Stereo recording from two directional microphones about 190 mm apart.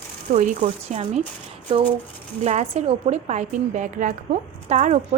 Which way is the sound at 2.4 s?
35° right (ahead or behind).